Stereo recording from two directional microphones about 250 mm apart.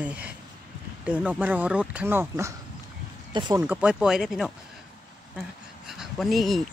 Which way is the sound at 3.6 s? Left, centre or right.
Centre.